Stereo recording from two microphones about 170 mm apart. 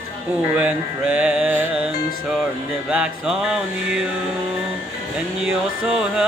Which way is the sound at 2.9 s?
5° right (ahead or behind).